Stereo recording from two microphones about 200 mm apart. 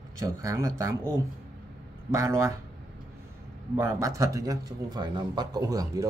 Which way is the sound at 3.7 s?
10° right (ahead or behind).